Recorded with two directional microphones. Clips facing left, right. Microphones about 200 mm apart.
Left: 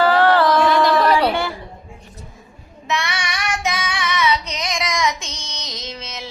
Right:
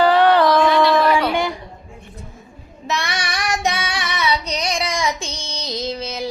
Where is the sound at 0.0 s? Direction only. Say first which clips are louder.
Right 1 dB; 15° right (ahead or behind).